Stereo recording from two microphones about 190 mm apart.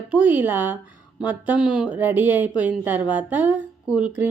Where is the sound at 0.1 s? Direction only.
10° right (ahead or behind).